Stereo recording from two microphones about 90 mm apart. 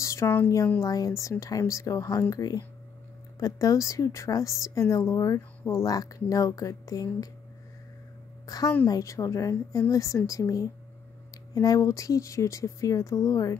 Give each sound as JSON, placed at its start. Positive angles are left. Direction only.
{"t": 0.0, "sound": "a sound", "side_deg": 35}
{"t": 0.7, "sound": "speech", "side_deg": 40}
{"t": 8.5, "sound": "a woman's voice", "side_deg": 40}